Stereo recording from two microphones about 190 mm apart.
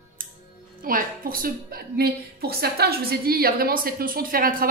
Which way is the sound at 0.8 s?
50° right (ahead or behind).